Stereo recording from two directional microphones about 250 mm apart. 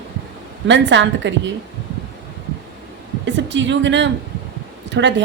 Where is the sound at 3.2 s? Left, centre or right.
Right.